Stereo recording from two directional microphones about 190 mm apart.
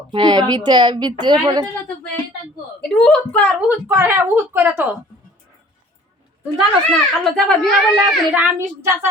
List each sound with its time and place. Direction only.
0.1 s speech: 25° right (ahead or behind)
2.8 s a child's voice: 5° left (ahead or behind)
3.7 s speech: 10° right (ahead or behind)
6.6 s a child's voice: 5° left (ahead or behind)
8.5 s speech: 15° right (ahead or behind)